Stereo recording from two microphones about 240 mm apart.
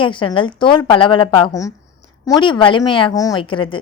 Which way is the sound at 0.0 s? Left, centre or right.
Left.